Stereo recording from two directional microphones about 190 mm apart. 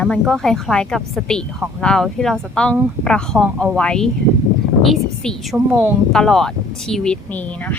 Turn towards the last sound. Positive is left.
turn(degrees=10)  # may be behind; listen again after turning